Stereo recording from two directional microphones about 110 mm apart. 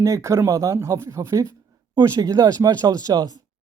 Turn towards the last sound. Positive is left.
turn(degrees=-35)  # may be behind; listen again after turning